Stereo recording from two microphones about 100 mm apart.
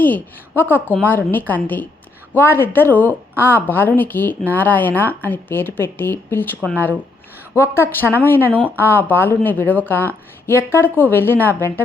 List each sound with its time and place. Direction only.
0.0 s a woman's voice: 20° left (ahead or behind)